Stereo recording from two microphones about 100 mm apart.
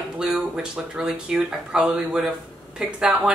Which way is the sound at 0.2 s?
5° right (ahead or behind).